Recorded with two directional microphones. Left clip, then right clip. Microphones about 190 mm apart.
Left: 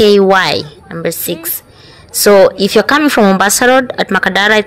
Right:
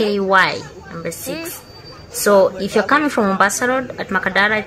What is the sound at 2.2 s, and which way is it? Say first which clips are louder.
A woman's voice: left 7 dB; 35° left (ahead or behind).